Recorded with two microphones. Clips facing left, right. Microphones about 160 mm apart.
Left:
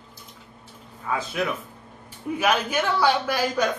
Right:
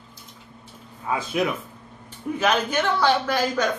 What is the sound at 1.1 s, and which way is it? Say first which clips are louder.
Speech: right 3 dB; 15° right (ahead or behind).